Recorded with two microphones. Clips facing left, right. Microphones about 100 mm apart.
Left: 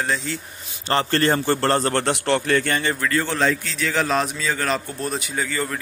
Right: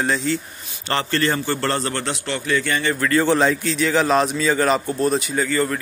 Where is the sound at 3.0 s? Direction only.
5° right (ahead or behind).